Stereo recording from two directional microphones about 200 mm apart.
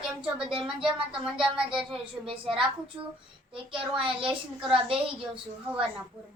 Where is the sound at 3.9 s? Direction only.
25° right (ahead or behind).